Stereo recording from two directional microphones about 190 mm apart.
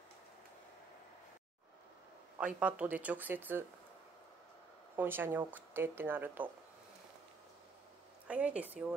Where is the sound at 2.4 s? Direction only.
5° right (ahead or behind).